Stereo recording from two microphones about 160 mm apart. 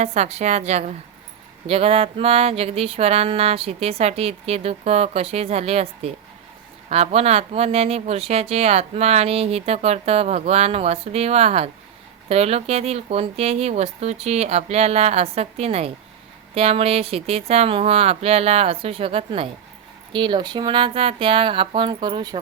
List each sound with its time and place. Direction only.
0.0 s a woman's voice: 45° right (ahead or behind); by 22.4 s 30° right (ahead or behind)